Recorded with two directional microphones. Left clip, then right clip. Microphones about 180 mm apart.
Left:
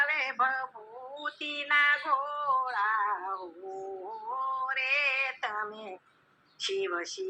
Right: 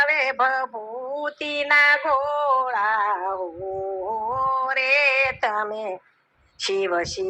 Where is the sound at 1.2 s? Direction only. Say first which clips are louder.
Right 8 dB; 30° right (ahead or behind).